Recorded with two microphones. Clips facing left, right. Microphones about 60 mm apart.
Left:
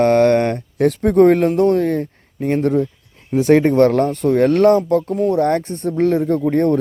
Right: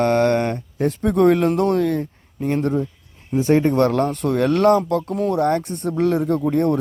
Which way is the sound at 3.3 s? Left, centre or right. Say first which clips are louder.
Left 4 dB; left.